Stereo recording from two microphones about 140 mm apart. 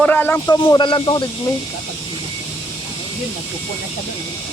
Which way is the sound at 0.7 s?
35° left (ahead or behind).